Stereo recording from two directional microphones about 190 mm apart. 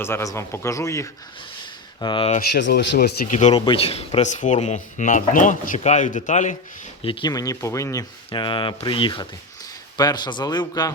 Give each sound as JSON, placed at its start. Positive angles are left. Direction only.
{"t": 0.0, "sound": "a man's voice", "side_deg": 15}
{"t": 2.5, "sound": "speech", "side_deg": 65}
{"t": 3.3, "sound": "speech", "side_deg": 35}
{"t": 7.0, "sound": "a man's voice", "side_deg": 25}
{"t": 8.3, "sound": "speech", "side_deg": 25}